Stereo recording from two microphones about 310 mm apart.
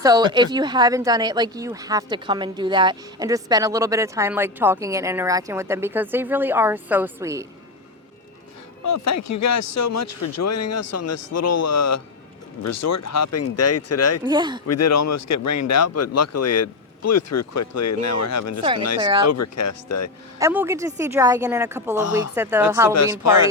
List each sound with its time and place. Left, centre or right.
0.0 s speech: centre
8.8 s speech: left
14.3 s speech: centre
14.7 s speech: left
18.9 s speech: centre
19.3 s speech: left
20.4 s speech: centre
22.0 s speech: left
22.4 s speech: centre